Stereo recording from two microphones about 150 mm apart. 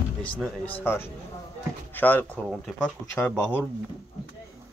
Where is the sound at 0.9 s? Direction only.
15° left (ahead or behind).